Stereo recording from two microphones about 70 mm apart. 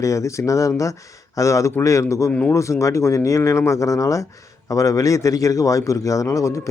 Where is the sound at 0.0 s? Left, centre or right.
Left.